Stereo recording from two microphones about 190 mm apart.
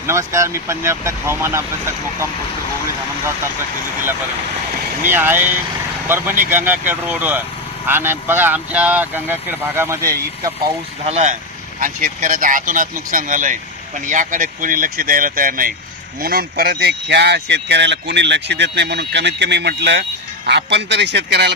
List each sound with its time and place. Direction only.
0.1 s speech: 15° right (ahead or behind)
5.0 s speech: 10° right (ahead or behind)
11.0 s speech: 35° right (ahead or behind); by 21.5 s 60° right (ahead or behind)